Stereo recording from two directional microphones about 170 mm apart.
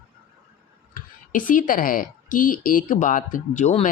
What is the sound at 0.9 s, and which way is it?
A woman's voice, 50° left (ahead or behind).